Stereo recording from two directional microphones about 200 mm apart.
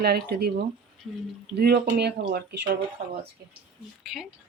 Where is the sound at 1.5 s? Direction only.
50° right (ahead or behind).